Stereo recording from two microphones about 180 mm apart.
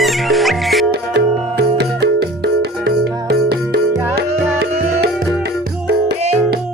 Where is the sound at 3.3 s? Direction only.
60° right (ahead or behind).